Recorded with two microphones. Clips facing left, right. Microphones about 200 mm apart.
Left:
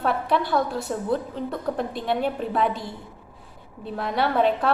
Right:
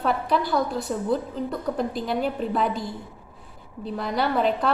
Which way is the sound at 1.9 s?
Centre (ahead or behind).